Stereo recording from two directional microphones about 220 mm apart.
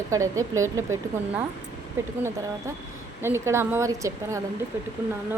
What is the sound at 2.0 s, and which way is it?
Speech, 10° right (ahead or behind).